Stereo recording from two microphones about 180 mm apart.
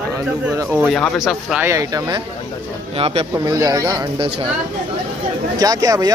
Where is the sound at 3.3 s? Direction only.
20° right (ahead or behind).